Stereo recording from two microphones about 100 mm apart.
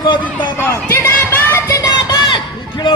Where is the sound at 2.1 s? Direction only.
50° left (ahead or behind).